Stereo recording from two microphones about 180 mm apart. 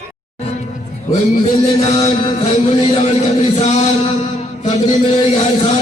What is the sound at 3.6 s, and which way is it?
Music, 40° left (ahead or behind).